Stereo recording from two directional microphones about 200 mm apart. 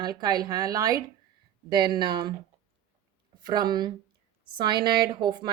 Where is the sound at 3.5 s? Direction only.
20° right (ahead or behind).